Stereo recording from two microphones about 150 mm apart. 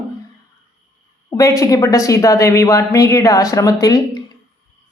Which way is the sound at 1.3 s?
20° left (ahead or behind).